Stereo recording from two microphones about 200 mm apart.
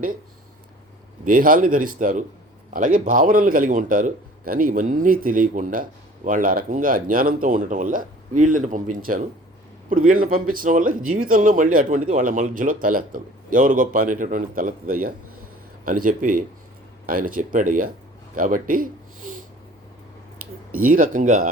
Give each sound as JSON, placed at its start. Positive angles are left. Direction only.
{"t": 1.2, "sound": "speech", "side_deg": -45}
{"t": 20.8, "sound": "speech", "side_deg": -45}